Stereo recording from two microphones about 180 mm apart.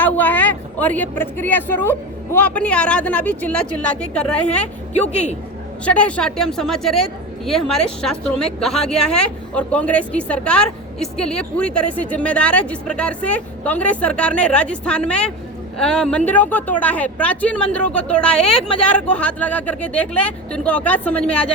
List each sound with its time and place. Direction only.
0.0 s speech: 10° left (ahead or behind)
5.0 s speech: 40° left (ahead or behind)
5.8 s a woman's voice: 5° left (ahead or behind)